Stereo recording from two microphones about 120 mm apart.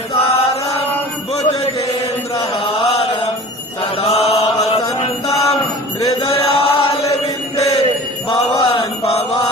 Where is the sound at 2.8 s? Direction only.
55° left (ahead or behind).